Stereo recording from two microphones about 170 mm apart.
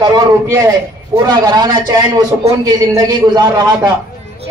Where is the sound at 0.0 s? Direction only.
25° right (ahead or behind).